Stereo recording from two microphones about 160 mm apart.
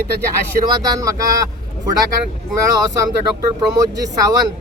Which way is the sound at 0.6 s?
25° right (ahead or behind).